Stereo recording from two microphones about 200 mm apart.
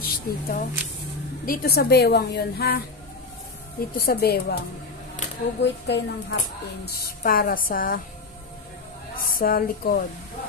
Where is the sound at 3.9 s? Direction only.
50° left (ahead or behind).